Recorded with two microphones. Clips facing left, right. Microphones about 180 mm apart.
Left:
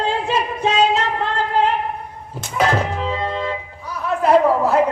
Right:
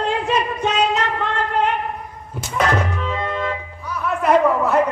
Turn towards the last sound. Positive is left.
turn(degrees=30)  # may be behind; listen again after turning